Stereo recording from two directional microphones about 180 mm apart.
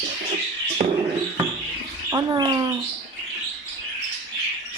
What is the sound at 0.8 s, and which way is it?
Music, 40° right (ahead or behind).